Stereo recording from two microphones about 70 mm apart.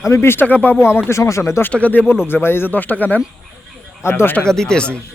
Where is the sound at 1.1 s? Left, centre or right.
Left.